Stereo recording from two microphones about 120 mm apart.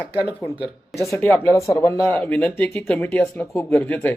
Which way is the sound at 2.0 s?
15° left (ahead or behind).